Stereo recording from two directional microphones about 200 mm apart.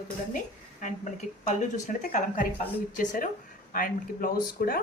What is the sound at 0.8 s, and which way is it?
A woman's voice, 40° left (ahead or behind).